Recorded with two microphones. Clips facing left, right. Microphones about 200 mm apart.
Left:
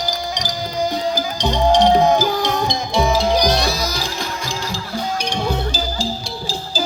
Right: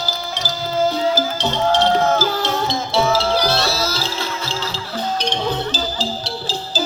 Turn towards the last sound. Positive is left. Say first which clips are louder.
# right 1 dB
turn(degrees=10)  # may be behind; listen again after turning